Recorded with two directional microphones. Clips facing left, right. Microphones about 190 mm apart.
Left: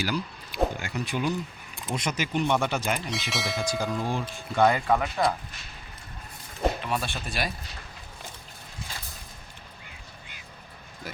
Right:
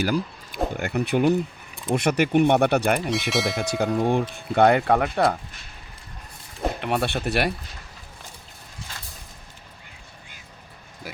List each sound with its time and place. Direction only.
0.0 s speech: 50° right (ahead or behind)
3.1 s speech: centre (ahead or behind)
3.6 s speech: 65° right (ahead or behind)
6.8 s speech: 65° right (ahead or behind)